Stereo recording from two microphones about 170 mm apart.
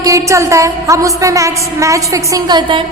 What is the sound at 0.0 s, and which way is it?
A woman's voice, 20° right (ahead or behind).